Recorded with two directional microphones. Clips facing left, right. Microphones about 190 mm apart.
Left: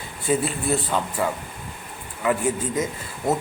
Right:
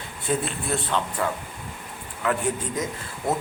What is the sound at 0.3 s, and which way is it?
A man's voice, 5° left (ahead or behind).